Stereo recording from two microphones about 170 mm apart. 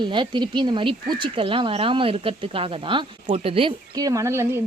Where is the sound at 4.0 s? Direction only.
20° right (ahead or behind).